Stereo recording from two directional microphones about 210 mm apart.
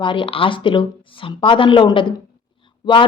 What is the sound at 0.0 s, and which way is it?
Speech, 25° left (ahead or behind).